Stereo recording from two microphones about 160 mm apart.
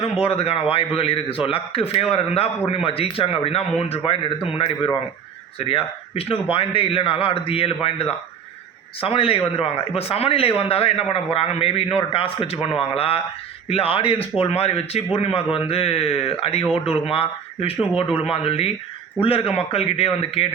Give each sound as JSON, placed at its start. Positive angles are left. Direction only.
{"t": 0.0, "sound": "a man's voice", "side_deg": 40}